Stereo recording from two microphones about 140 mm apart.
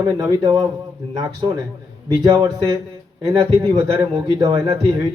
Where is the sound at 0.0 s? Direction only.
30° right (ahead or behind).